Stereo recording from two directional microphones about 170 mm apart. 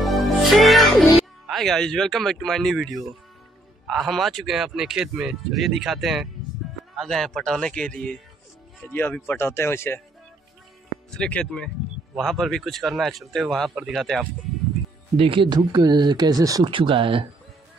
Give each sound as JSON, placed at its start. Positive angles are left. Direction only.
{"t": 0.0, "sound": "music", "side_deg": 0}
{"t": 1.5, "sound": "speech", "side_deg": 0}
{"t": 11.1, "sound": "speech", "side_deg": 5}
{"t": 15.1, "sound": "speech", "side_deg": -30}